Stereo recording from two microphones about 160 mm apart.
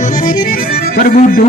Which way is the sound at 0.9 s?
65° left (ahead or behind).